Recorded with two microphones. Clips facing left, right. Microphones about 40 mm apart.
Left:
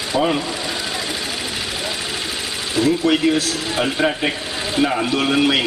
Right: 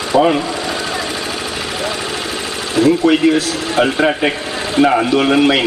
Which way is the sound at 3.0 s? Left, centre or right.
Centre.